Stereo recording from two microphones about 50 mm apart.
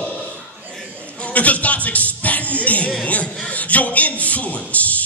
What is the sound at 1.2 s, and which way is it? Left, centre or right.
Speech, left.